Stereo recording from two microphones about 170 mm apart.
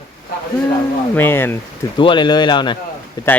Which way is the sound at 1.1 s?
10° left (ahead or behind).